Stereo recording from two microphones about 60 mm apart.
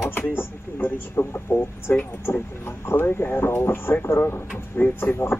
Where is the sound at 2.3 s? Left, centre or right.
Left.